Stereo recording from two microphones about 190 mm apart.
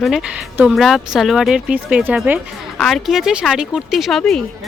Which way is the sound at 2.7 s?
Centre (ahead or behind).